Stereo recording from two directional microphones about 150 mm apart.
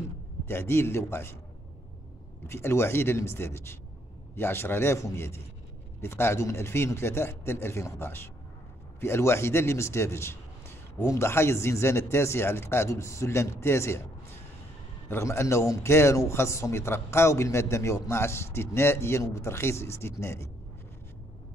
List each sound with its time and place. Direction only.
0.5 s a man's voice: 15° left (ahead or behind)
2.4 s a man's voice: 15° left (ahead or behind)
15.0 s a man's voice: 15° left (ahead or behind)